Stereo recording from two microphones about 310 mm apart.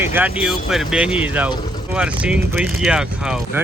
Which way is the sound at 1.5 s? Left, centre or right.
Centre.